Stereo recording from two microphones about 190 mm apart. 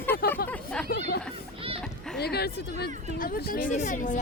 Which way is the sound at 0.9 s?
55° left (ahead or behind).